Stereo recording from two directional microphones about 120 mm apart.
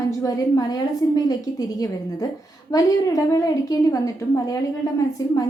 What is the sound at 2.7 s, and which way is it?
A woman's voice, 30° left (ahead or behind).